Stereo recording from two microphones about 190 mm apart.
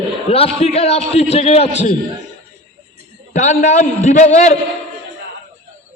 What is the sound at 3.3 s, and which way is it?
A man's voice, 35° left (ahead or behind).